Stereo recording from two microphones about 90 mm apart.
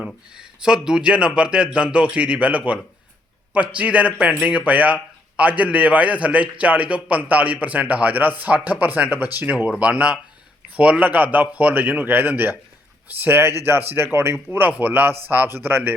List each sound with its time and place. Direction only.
0.3 s a man's voice: 10° right (ahead or behind)